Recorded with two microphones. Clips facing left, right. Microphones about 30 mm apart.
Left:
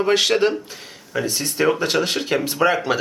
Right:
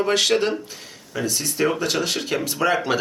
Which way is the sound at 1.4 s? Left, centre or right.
Left.